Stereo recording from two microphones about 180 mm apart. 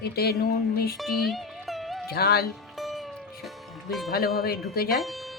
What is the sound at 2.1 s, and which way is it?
Speech, 60° left (ahead or behind).